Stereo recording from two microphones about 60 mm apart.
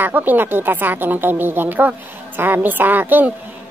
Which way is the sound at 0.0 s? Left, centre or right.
Right.